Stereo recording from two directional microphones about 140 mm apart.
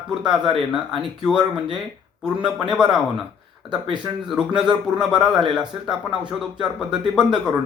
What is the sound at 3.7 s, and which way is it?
Speech, 35° right (ahead or behind).